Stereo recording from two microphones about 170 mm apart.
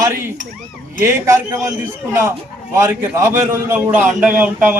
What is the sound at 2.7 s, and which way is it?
A man's voice, 15° right (ahead or behind).